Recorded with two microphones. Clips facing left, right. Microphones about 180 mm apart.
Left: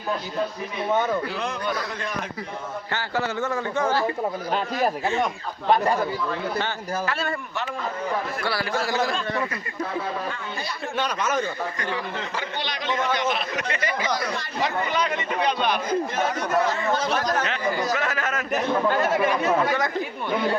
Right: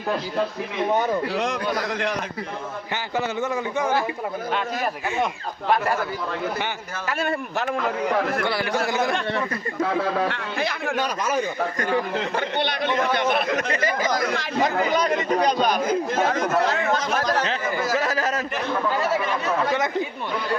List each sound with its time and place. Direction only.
1.3 s a man's voice: 75° right (ahead or behind)
2.9 s a man's voice: 20° right (ahead or behind)
7.1 s a man's voice: 15° right (ahead or behind)
7.8 s a man's voice: 70° right (ahead or behind)
8.4 s speech: 20° right (ahead or behind)
10.0 s a man's voice: 75° right (ahead or behind)
11.0 s a man's voice: 10° right (ahead or behind)
11.8 s a man's voice: 45° right (ahead or behind)
13.7 s a man's voice: 40° right (ahead or behind)